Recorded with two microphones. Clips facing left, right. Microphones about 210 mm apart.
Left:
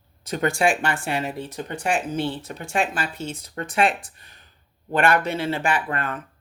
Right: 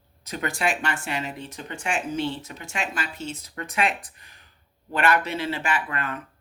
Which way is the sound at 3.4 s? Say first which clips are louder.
Left 5 dB; 35° left (ahead or behind).